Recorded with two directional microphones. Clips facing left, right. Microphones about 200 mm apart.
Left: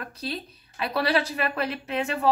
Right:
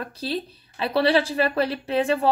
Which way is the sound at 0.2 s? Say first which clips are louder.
Right 5 dB; 30° right (ahead or behind).